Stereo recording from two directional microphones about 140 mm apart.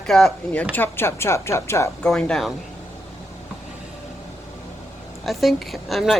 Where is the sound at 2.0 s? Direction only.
5° left (ahead or behind).